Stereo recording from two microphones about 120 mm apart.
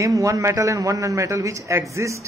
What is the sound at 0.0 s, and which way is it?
A man's voice, 25° right (ahead or behind).